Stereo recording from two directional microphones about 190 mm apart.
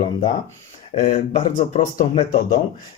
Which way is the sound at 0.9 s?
40° left (ahead or behind).